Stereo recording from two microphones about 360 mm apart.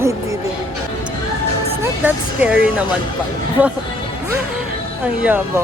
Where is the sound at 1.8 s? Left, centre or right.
Centre.